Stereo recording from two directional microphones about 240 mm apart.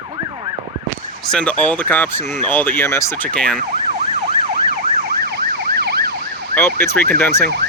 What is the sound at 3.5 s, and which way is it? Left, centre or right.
Emergency vehicle, right.